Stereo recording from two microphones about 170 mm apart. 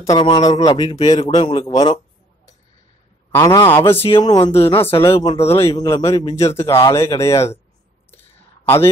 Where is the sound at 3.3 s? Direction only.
15° left (ahead or behind).